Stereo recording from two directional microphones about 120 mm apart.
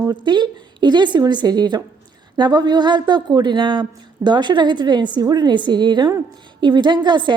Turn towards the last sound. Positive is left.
turn(degrees=-40)  # may be behind; listen again after turning